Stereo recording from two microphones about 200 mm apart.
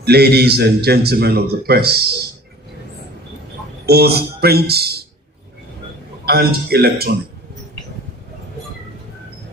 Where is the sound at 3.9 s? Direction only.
50° right (ahead or behind).